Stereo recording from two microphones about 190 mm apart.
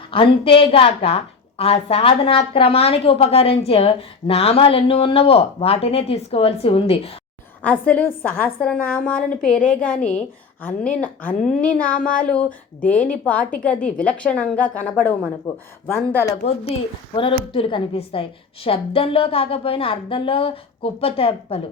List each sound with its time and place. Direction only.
0.1 s a woman's voice: 30° left (ahead or behind)
7.6 s a woman's voice: 5° left (ahead or behind)
11.9 s speech: 45° left (ahead or behind)
12.2 s a woman's voice: 5° left (ahead or behind)
15.5 s a woman's voice: 30° left (ahead or behind)
15.9 s a woman's voice: 10° left (ahead or behind)
17.2 s a woman's voice: 30° left (ahead or behind)